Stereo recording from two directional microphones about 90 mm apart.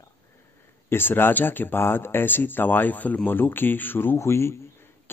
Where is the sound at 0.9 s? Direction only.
25° left (ahead or behind).